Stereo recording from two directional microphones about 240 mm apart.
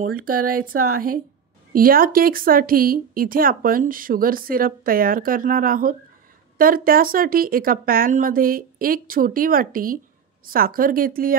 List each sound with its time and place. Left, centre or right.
0.0 s speech: right